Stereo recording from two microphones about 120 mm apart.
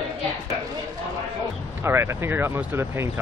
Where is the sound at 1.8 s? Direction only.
20° right (ahead or behind).